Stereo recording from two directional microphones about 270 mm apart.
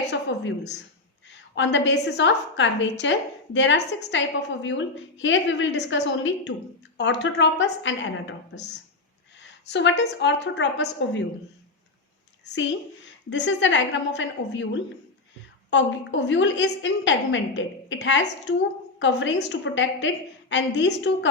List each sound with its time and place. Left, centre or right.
0.1 s a sound: left
1.3 s a woman's voice: left
13.3 s a woman's voice: left